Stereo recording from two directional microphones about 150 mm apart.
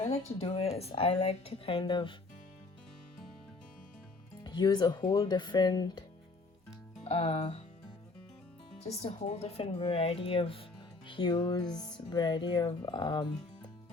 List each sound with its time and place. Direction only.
0.0 s speech: 40° left (ahead or behind)
4.4 s speech: 30° left (ahead or behind)
7.0 s speech: 45° left (ahead or behind)
8.8 s speech: 40° left (ahead or behind)